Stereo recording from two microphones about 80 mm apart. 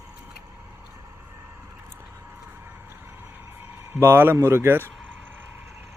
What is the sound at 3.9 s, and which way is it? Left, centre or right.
Speech, right.